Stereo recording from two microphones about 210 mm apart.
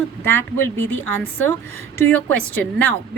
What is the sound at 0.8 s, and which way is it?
Speech, 65° right (ahead or behind).